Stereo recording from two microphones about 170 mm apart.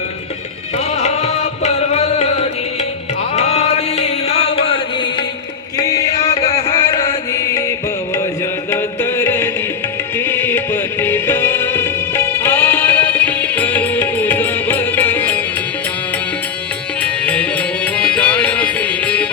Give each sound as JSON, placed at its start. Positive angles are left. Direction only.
{"t": 0.9, "sound": "music", "side_deg": 40}
{"t": 5.7, "sound": "music", "side_deg": 20}
{"t": 6.3, "sound": "music", "side_deg": 35}
{"t": 6.9, "sound": "chant", "side_deg": 20}
{"t": 8.7, "sound": "music", "side_deg": 15}
{"t": 17.0, "sound": "music", "side_deg": 5}